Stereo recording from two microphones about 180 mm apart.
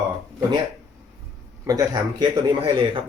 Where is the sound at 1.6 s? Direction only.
20° right (ahead or behind).